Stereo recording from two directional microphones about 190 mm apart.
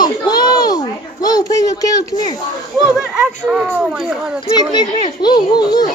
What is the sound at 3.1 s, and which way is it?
Speech, 5° right (ahead or behind).